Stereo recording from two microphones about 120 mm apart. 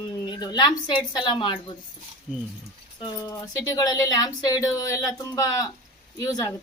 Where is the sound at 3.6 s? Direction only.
30° left (ahead or behind).